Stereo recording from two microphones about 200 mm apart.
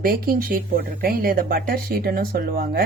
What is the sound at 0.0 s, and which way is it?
Speech, 45° right (ahead or behind).